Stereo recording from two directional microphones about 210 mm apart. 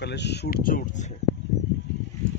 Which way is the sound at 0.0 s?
55° left (ahead or behind).